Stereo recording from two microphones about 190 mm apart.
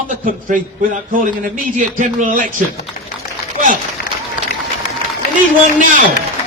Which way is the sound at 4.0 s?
50° left (ahead or behind).